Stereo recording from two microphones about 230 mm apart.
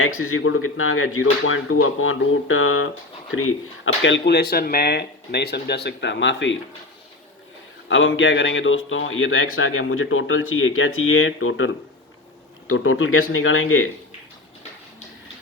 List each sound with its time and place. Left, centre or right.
0.0 s a man's voice: left
4.0 s speech: left
7.9 s a man's voice: left